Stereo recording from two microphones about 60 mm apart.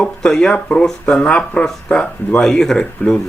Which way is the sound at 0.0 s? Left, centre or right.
Centre.